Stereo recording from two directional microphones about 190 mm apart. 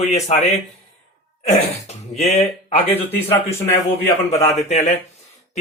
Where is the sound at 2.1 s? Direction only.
35° left (ahead or behind).